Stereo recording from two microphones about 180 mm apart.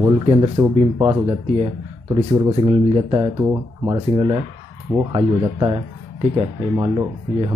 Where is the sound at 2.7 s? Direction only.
30° right (ahead or behind).